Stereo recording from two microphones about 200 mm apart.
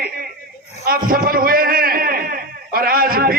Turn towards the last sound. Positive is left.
turn(degrees=-45)  # may be behind; listen again after turning